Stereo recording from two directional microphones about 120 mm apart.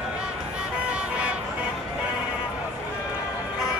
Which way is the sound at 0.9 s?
10° right (ahead or behind).